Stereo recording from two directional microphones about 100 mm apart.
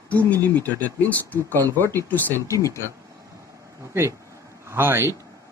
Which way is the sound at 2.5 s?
30° left (ahead or behind).